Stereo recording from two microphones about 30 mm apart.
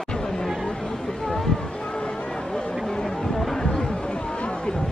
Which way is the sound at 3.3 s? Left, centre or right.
Centre.